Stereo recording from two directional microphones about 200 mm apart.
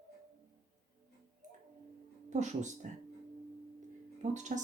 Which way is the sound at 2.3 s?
35° right (ahead or behind).